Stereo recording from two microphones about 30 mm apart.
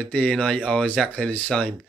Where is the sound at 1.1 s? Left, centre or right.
Left.